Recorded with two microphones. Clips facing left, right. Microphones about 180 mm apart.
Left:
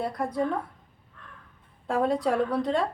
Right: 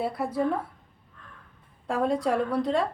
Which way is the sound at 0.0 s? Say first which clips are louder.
Right 1 dB; 5° right (ahead or behind).